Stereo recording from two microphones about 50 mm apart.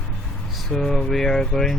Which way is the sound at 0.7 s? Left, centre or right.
Centre.